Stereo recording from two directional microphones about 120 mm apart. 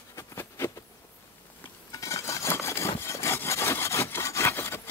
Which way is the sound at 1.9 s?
25° left (ahead or behind).